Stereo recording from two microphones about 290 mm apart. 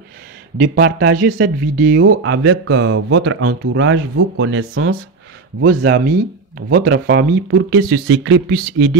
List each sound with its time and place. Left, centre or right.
0.7 s speech: right
2.0 s speech: right